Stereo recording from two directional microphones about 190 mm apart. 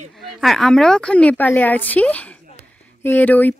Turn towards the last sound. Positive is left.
turn(degrees=10)  # may be behind; listen again after turning